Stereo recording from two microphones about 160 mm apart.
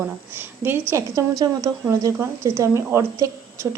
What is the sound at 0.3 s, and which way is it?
A woman's voice, 15° right (ahead or behind).